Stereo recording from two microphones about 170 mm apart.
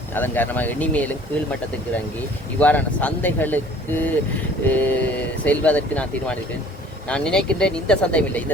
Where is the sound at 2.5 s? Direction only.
10° left (ahead or behind).